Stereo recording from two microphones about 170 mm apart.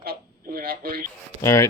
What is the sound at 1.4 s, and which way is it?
Speech, 15° left (ahead or behind).